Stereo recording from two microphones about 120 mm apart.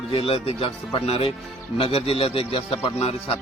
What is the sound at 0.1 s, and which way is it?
Speech, 50° left (ahead or behind).